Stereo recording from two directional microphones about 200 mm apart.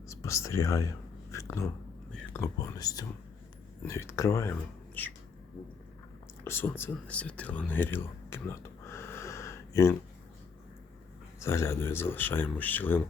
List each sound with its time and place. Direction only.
0.1 s whispering: 15° left (ahead or behind)
2.3 s speech: 15° left (ahead or behind)
6.4 s speech: 10° left (ahead or behind)
11.3 s speech: 15° left (ahead or behind)